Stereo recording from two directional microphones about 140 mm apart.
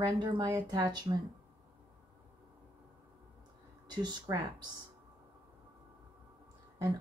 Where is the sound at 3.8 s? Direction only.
30° right (ahead or behind).